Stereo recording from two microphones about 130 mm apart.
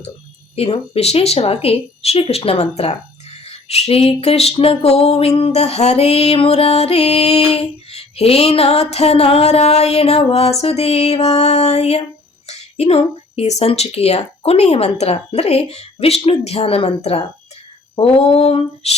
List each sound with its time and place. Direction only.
0.5 s music: 50° left (ahead or behind)